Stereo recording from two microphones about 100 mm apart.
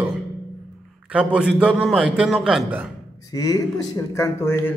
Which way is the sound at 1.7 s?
Centre (ahead or behind).